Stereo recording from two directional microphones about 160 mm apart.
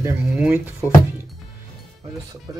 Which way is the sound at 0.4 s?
5° right (ahead or behind).